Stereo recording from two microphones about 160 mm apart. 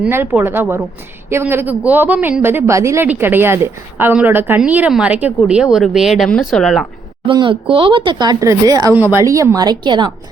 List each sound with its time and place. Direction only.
0.0 s speech: 15° right (ahead or behind)
7.3 s speech: 30° right (ahead or behind)